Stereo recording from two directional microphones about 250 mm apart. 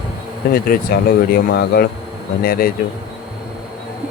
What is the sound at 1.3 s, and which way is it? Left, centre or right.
Speech, left.